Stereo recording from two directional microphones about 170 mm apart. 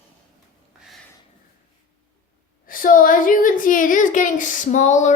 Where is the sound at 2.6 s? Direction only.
55° left (ahead or behind).